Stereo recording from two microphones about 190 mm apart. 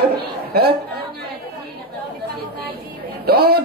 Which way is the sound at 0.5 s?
55° right (ahead or behind).